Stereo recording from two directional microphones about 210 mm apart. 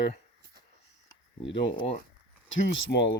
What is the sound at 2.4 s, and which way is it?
Speech, 60° left (ahead or behind).